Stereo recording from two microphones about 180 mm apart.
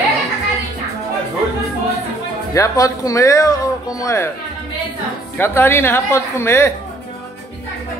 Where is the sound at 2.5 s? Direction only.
20° left (ahead or behind).